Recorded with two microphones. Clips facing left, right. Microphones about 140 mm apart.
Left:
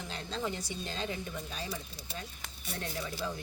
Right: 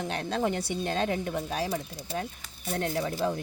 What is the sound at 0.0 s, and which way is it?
Speech, 65° right (ahead or behind).